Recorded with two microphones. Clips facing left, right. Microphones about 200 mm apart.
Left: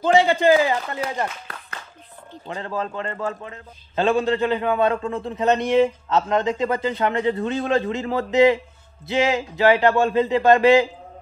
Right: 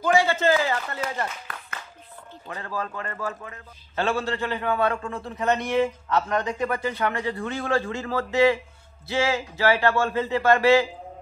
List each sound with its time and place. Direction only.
0.0 s speech: 20° left (ahead or behind)
2.4 s a man's voice: 25° left (ahead or behind)